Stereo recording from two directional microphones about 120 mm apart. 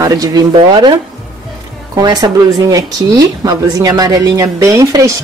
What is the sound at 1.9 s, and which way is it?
Speech, 35° right (ahead or behind).